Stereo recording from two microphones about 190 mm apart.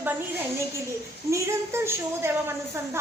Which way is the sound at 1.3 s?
15° right (ahead or behind).